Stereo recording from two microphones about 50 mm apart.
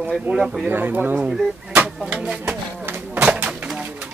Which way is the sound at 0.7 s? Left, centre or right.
Right.